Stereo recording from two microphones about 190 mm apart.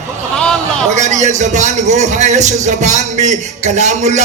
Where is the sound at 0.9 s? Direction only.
40° right (ahead or behind).